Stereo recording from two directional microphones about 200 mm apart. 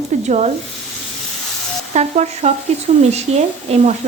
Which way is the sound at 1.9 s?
35° right (ahead or behind).